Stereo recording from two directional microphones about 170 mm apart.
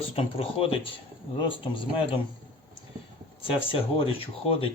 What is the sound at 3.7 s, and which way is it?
Speech, 35° left (ahead or behind).